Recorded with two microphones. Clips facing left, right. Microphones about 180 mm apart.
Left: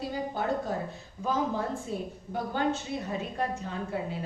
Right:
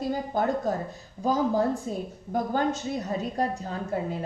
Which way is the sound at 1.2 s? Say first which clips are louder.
Right 6 dB; 40° right (ahead or behind).